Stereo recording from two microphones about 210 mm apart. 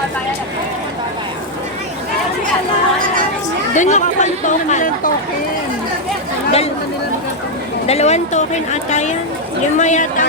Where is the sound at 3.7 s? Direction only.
35° left (ahead or behind).